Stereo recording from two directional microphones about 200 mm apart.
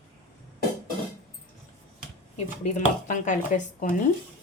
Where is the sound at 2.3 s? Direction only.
35° left (ahead or behind).